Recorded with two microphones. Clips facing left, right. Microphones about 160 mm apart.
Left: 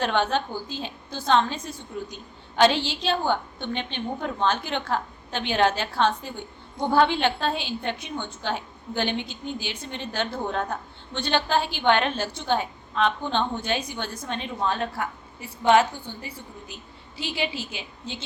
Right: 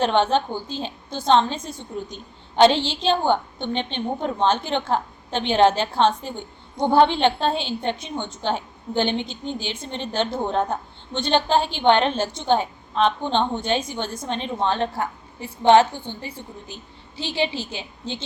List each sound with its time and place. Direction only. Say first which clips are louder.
0.0 s a woman's voice: right 5 dB; 25° right (ahead or behind)